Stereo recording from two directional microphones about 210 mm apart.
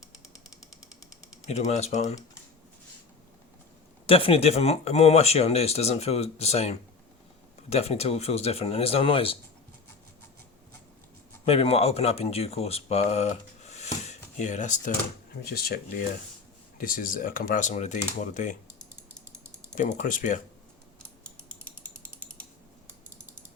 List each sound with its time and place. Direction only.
1.5 s speech: 30° left (ahead or behind)
4.0 s speech: 25° left (ahead or behind)
11.4 s speech: 30° left (ahead or behind)
16.7 s speech: 40° left (ahead or behind)
19.7 s speech: 40° left (ahead or behind)